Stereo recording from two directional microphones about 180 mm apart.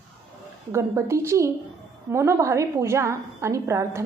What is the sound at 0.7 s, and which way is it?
A woman's voice, 15° right (ahead or behind).